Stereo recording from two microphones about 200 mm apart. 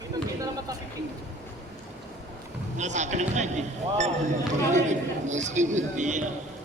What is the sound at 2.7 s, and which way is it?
A man's voice, 35° right (ahead or behind).